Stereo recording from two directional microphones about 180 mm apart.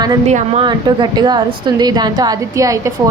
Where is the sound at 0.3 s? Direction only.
40° right (ahead or behind).